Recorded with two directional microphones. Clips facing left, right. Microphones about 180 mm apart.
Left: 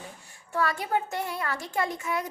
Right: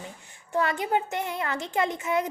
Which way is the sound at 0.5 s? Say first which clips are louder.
Right 2 dB; 20° right (ahead or behind).